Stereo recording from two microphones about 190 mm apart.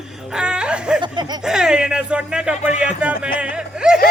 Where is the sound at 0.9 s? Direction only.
25° right (ahead or behind).